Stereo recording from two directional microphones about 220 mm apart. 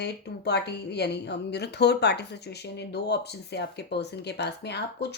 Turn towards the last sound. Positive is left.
turn(degrees=50)  # may be behind; listen again after turning